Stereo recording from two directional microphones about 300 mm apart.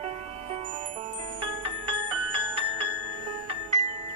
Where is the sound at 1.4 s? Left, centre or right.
Centre.